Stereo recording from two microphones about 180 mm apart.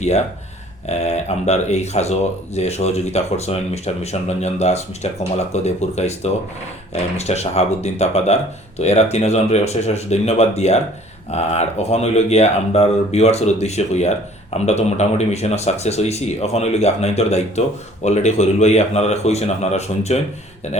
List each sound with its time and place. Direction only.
0.9 s speech: 35° left (ahead or behind)